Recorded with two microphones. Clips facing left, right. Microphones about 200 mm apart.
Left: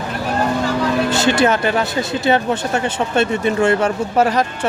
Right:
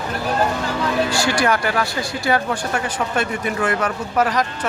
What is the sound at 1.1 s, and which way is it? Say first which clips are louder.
Speech: left 4 dB; 25° left (ahead or behind).